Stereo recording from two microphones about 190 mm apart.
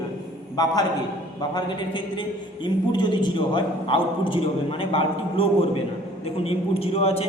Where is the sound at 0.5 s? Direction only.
20° left (ahead or behind).